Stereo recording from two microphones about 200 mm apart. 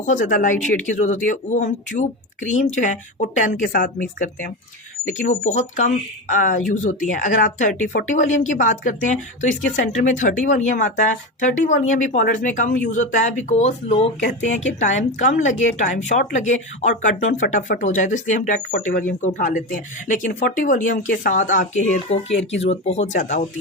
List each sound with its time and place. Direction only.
0.0 s speech: 40° left (ahead or behind)